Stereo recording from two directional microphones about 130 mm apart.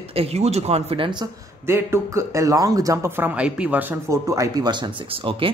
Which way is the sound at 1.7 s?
20° right (ahead or behind).